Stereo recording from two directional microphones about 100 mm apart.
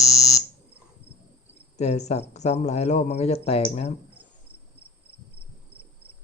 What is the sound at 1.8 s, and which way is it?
Speech, 90° left.